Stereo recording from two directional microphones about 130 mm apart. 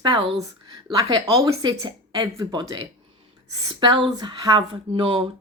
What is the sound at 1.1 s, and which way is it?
Speech, 45° right (ahead or behind).